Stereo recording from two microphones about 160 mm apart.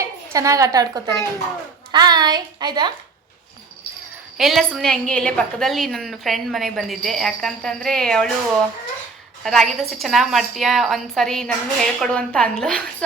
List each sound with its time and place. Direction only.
0.0 s a woman's voice: 20° right (ahead or behind)
4.4 s a woman's voice: centre (ahead or behind)
9.4 s a woman's voice: centre (ahead or behind)